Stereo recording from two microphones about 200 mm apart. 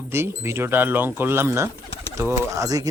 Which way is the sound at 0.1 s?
10° right (ahead or behind).